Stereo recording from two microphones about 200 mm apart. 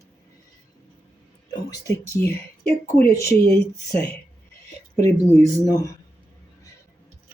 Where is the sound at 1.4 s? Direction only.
15° left (ahead or behind).